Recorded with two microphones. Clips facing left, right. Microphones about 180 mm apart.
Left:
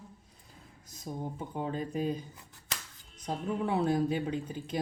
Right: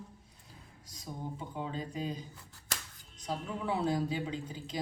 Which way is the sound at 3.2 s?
55° left (ahead or behind).